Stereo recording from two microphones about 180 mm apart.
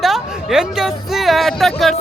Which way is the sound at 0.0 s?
Centre (ahead or behind).